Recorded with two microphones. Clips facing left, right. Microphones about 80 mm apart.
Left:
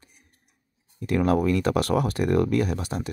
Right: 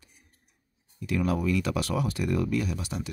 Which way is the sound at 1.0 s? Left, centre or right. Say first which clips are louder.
Left 6 dB; left.